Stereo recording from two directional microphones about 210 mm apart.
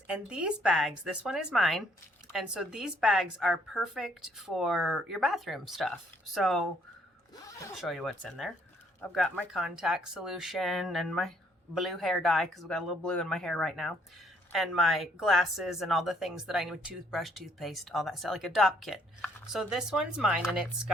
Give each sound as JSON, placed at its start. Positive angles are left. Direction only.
{"t": 0.1, "sound": "speech", "side_deg": -5}
{"t": 7.8, "sound": "speech", "side_deg": 0}